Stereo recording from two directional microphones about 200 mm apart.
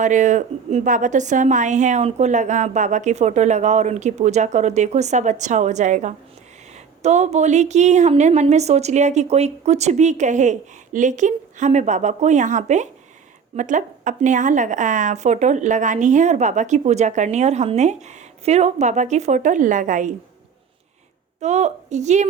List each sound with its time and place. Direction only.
0.0 s speech: 40° right (ahead or behind)
21.4 s speech: 35° right (ahead or behind)